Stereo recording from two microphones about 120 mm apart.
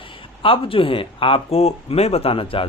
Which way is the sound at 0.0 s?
45° left (ahead or behind).